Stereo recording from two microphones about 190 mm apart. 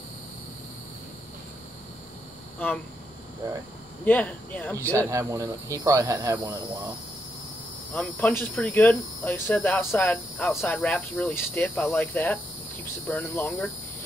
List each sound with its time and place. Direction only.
4.0 s speech: 10° left (ahead or behind)
4.9 s speech: 15° right (ahead or behind)
7.9 s speech: 10° left (ahead or behind)